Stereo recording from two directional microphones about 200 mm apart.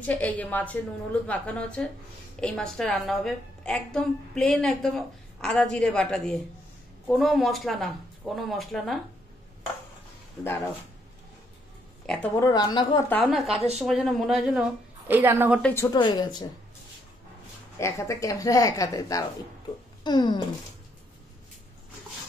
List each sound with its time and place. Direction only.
0.0 s a woman's voice: 5° left (ahead or behind)
10.4 s speech: 10° left (ahead or behind)
12.4 s speech: 20° left (ahead or behind)
13.1 s a woman's voice: centre (ahead or behind)
15.6 s speech: 15° left (ahead or behind)
17.7 s speech: 15° left (ahead or behind)